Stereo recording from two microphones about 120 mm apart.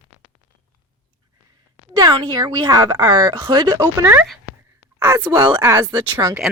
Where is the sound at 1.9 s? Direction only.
35° right (ahead or behind).